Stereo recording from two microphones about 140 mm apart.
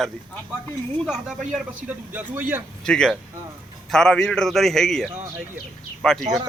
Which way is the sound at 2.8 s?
5° left (ahead or behind).